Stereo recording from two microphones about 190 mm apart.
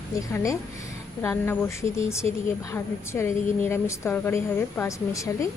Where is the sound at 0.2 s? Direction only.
15° left (ahead or behind).